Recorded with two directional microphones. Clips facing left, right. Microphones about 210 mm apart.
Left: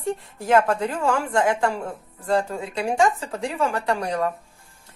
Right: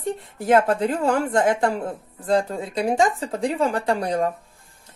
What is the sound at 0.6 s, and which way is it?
Speech, 30° right (ahead or behind).